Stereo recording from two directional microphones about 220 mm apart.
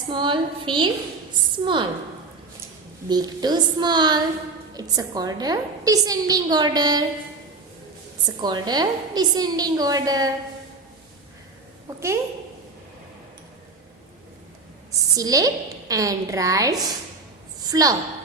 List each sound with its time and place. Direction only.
0.1 s a woman's voice: 20° right (ahead or behind)
3.1 s a woman's voice: 20° right (ahead or behind)
8.4 s a woman's voice: 20° right (ahead or behind)
11.9 s a woman's voice: 10° right (ahead or behind)
15.1 s a woman's voice: 15° right (ahead or behind)